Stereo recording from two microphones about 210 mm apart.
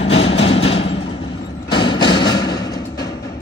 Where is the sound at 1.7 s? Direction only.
25° left (ahead or behind).